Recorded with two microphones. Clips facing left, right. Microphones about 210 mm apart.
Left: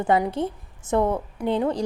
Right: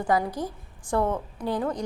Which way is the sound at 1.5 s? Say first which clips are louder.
Left 5 dB; 25° left (ahead or behind).